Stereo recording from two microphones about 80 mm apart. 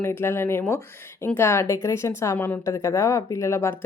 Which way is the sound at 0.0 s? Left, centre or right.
Left.